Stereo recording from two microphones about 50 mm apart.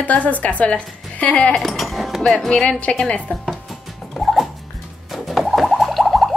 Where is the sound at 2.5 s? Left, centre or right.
Centre.